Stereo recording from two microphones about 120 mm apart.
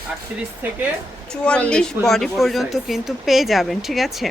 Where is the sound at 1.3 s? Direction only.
10° left (ahead or behind).